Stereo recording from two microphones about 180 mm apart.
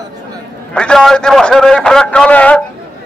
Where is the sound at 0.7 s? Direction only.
5° left (ahead or behind).